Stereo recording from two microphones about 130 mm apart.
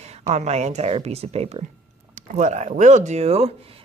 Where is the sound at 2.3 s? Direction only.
65° right (ahead or behind).